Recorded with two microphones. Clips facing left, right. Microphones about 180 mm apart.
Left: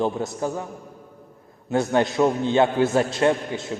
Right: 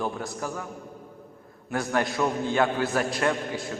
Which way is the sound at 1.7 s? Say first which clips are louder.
Left 6 dB; 25° left (ahead or behind).